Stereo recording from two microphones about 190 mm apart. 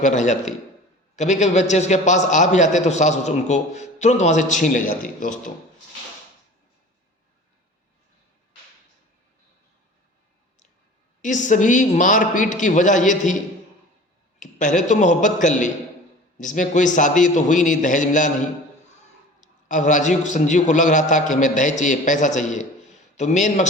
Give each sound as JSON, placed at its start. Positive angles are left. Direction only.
{"t": 0.0, "sound": "a man's voice", "side_deg": 40}
{"t": 11.2, "sound": "a man's voice", "side_deg": 40}
{"t": 14.3, "sound": "a man's voice", "side_deg": 40}
{"t": 19.4, "sound": "a man's voice", "side_deg": 40}